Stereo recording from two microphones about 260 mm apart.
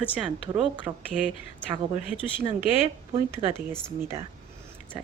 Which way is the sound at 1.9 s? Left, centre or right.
Centre.